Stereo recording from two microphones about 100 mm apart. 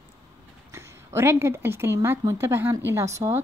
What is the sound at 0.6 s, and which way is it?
Speech, 25° right (ahead or behind).